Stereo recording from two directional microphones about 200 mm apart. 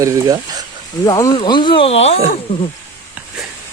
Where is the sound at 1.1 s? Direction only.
20° left (ahead or behind).